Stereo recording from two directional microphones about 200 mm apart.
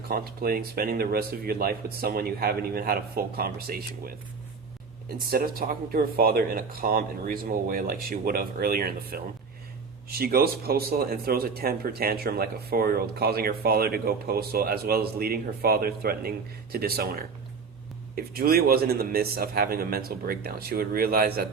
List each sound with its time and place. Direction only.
0.1 s speech: 50° right (ahead or behind)